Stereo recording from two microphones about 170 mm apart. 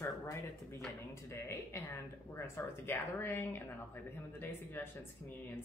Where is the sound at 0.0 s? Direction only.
15° left (ahead or behind).